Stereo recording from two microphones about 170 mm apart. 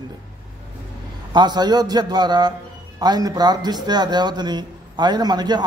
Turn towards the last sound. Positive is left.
turn(degrees=-25)  # may be behind; listen again after turning